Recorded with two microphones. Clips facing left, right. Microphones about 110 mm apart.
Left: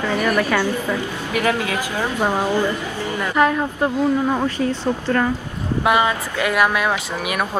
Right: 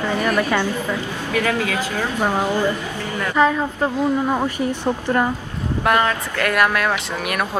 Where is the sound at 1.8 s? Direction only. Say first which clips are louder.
Even; 15° left (ahead or behind).